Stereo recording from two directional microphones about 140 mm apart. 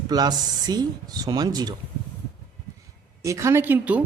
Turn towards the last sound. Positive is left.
turn(degrees=-10)  # may be behind; listen again after turning